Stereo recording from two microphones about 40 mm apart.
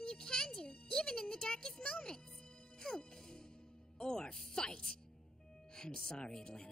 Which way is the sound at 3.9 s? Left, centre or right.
Centre.